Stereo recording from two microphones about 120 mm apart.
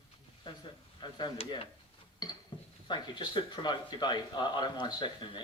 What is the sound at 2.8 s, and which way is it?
A man's voice, 40° left (ahead or behind).